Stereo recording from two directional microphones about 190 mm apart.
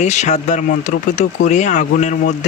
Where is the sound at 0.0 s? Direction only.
40° left (ahead or behind).